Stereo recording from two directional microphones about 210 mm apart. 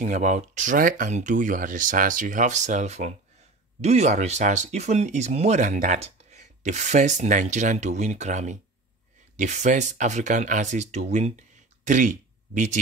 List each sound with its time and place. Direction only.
0.0 s speech: 35° right (ahead or behind)